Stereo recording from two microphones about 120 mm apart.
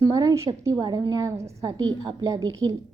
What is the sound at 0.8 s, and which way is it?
A woman's voice, 35° right (ahead or behind).